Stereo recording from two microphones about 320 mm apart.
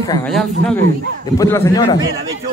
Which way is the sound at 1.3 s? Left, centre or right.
Centre.